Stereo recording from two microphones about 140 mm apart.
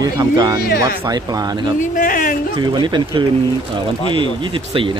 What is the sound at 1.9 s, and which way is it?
Speech, 80° left.